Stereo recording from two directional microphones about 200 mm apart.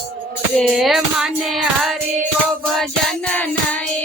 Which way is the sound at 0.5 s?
Centre (ahead or behind).